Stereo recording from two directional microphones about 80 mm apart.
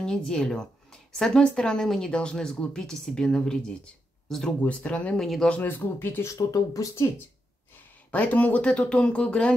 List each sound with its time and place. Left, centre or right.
0.0 s a woman's voice: centre
5.6 s speech: left
6.2 s speech: left
8.1 s a woman's voice: centre